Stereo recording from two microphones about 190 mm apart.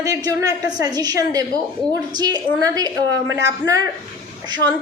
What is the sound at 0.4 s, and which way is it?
A woman's voice, 20° right (ahead or behind).